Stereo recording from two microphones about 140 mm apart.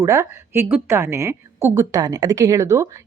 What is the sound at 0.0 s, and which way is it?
A woman's voice, 20° right (ahead or behind).